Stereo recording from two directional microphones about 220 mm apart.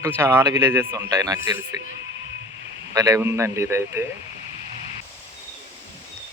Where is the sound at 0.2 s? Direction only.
10° right (ahead or behind).